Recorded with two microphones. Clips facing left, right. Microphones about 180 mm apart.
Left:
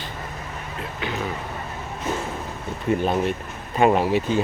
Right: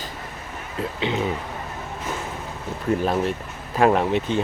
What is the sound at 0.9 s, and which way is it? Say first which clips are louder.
Speech: right 4 dB; 20° right (ahead or behind).